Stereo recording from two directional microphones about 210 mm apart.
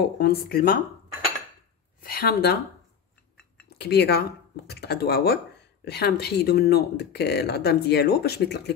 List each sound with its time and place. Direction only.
0.0 s speech: 45° left (ahead or behind)
2.0 s a woman's voice: 45° left (ahead or behind)
3.7 s speech: 50° left (ahead or behind)